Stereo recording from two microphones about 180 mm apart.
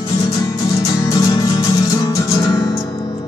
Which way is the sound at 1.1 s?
20° left (ahead or behind).